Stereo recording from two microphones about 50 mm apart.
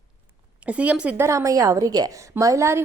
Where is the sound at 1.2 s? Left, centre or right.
Right.